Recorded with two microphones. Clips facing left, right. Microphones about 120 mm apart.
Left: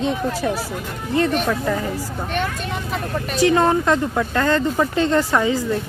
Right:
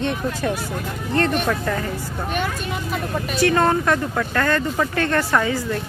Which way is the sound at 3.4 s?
15° left (ahead or behind).